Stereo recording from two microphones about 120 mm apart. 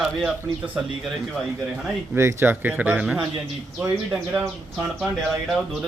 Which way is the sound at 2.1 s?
20° right (ahead or behind).